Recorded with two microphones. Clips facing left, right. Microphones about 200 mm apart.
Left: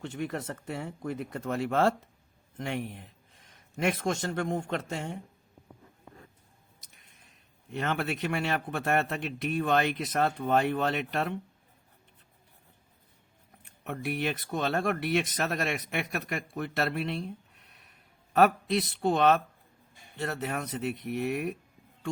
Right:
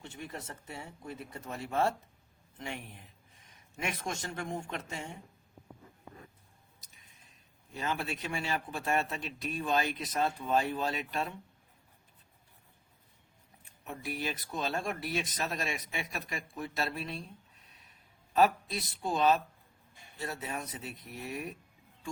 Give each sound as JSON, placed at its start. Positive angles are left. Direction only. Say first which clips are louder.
{"t": 0.0, "sound": "speech", "louder": "left 9 dB", "side_deg": 65}
{"t": 2.6, "sound": "speech", "louder": "left 8 dB", "side_deg": 60}
{"t": 7.7, "sound": "speech", "louder": "left 5 dB", "side_deg": 65}
{"t": 13.8, "sound": "speech", "louder": "left 6 dB", "side_deg": 65}
{"t": 18.3, "sound": "speech", "louder": "left 4 dB", "side_deg": 70}